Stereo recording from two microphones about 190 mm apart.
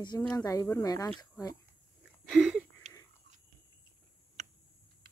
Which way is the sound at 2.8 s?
40° right (ahead or behind).